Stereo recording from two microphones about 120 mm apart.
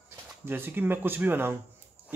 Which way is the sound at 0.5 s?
20° right (ahead or behind).